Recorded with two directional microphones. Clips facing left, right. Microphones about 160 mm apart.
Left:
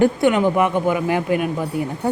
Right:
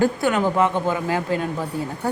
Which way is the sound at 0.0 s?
20° left (ahead or behind).